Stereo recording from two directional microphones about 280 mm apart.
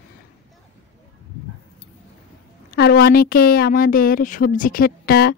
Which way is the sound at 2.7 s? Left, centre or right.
Left.